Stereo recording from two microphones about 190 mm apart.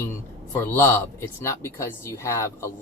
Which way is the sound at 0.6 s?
15° left (ahead or behind).